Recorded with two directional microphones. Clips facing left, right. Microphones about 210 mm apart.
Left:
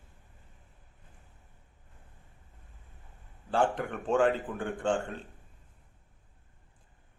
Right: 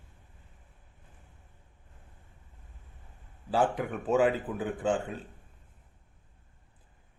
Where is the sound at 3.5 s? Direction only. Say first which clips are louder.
Right 1 dB; 5° right (ahead or behind).